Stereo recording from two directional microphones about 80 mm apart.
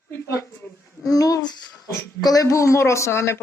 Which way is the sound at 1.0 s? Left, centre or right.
Left.